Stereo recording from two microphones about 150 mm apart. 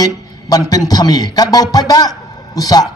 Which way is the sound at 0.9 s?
25° left (ahead or behind).